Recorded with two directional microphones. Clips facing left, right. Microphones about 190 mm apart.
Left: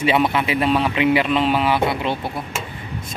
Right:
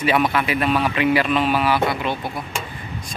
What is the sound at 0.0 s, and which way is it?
A man's voice, 25° left (ahead or behind).